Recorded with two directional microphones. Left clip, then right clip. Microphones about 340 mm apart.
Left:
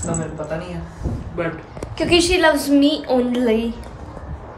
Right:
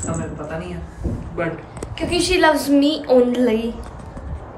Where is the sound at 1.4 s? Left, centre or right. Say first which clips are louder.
Even; centre.